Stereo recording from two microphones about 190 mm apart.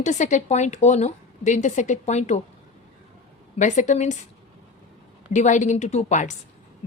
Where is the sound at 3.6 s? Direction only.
40° left (ahead or behind).